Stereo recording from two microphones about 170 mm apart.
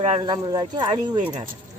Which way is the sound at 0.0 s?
30° right (ahead or behind).